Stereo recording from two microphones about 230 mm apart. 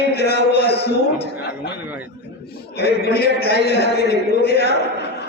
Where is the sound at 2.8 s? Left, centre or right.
Left.